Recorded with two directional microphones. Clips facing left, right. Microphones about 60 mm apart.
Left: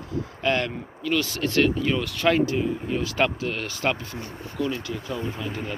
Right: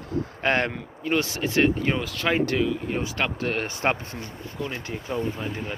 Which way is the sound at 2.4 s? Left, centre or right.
Right.